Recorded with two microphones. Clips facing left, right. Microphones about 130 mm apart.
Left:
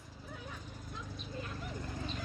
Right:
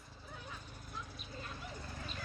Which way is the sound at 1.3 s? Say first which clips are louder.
Left 4 dB; 15° left (ahead or behind).